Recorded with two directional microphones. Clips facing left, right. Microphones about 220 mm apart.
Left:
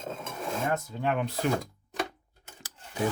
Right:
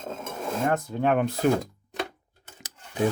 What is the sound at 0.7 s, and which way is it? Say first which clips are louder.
Speech: right 7 dB; 55° right (ahead or behind).